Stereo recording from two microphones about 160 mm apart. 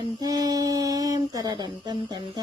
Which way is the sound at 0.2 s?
25° right (ahead or behind).